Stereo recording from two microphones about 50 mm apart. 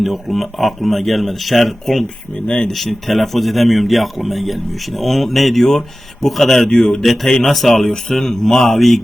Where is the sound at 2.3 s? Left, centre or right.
Centre.